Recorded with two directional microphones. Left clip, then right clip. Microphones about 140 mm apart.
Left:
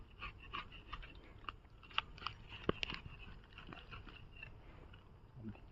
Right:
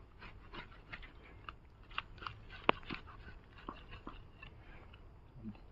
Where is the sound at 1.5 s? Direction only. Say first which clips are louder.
Left 2 dB; 50° left (ahead or behind).